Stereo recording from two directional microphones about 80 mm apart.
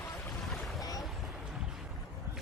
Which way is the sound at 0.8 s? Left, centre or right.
Left.